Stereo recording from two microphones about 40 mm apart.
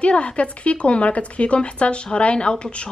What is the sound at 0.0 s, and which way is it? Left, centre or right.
Speech, left.